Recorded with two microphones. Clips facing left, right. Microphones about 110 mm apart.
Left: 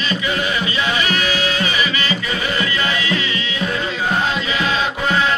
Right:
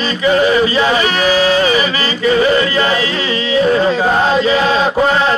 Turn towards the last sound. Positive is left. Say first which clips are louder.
# right 6 dB
turn(degrees=-35)  # may be behind; listen again after turning